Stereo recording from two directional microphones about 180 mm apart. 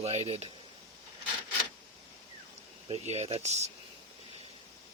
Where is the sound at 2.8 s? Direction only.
35° right (ahead or behind).